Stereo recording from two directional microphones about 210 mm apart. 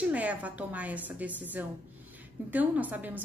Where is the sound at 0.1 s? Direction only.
5° right (ahead or behind).